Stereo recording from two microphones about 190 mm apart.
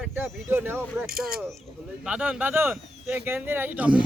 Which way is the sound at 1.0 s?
50° right (ahead or behind).